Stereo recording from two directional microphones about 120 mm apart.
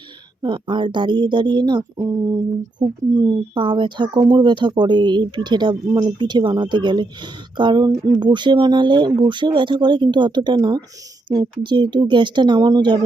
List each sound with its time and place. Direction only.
0.4 s speech: 40° right (ahead or behind)